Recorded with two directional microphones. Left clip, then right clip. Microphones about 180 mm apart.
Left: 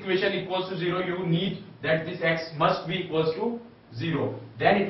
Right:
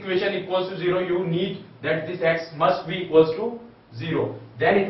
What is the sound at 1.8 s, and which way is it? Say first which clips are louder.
A man's voice: right 2 dB; centre (ahead or behind).